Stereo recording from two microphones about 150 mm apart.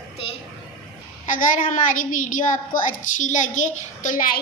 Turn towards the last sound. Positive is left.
turn(degrees=60)  # may be behind; listen again after turning